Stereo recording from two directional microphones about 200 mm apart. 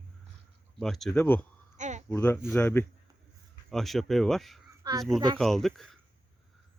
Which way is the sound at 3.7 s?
Centre (ahead or behind).